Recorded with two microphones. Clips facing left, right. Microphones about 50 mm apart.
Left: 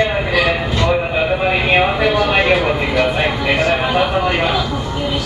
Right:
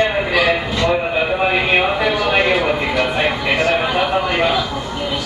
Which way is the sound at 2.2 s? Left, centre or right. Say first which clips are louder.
Left 2 dB; centre.